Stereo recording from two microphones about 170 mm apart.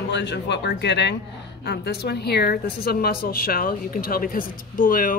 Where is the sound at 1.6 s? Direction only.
70° left (ahead or behind).